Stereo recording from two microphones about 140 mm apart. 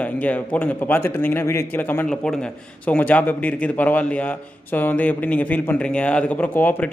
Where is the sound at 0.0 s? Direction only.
10° left (ahead or behind).